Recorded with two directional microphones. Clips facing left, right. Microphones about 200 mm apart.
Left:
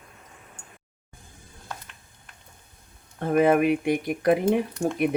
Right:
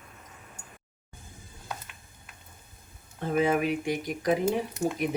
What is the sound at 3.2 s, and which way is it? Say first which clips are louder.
Speech: left 6 dB; 60° left (ahead or behind).